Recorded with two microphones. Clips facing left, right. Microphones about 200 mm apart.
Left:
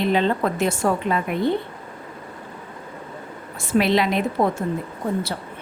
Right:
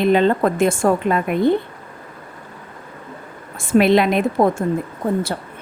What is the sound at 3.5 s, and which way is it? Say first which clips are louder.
A woman's voice: right 5 dB; 50° right (ahead or behind).